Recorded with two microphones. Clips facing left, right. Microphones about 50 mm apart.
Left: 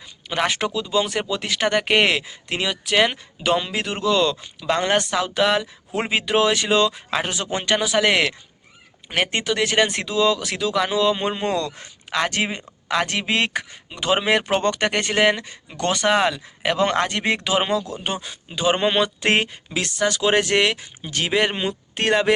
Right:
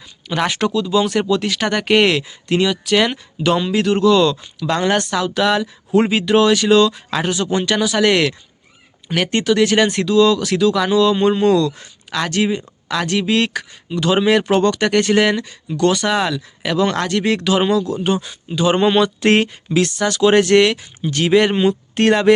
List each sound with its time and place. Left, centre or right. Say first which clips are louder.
0.3 s speech: right 4 dB; centre